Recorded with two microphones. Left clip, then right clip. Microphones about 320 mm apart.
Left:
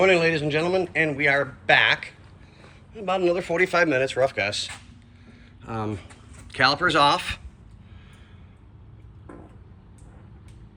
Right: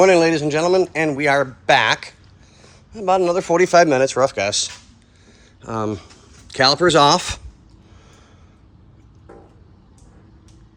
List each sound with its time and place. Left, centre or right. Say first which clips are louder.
0.0 s speech: right 6 dB; centre
4.1 s speech: right 5 dB; right
4.4 s speech: right 5 dB; centre